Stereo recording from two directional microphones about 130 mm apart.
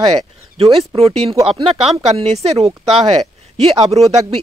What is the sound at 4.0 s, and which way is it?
Speech, 55° right (ahead or behind).